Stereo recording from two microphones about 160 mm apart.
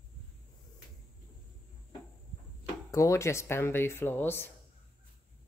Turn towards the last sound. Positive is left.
turn(degrees=15)  # may be behind; listen again after turning